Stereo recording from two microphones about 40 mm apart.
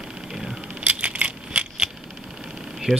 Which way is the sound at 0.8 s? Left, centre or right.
Right.